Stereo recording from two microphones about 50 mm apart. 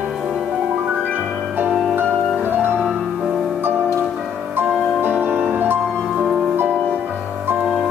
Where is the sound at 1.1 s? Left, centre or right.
Right.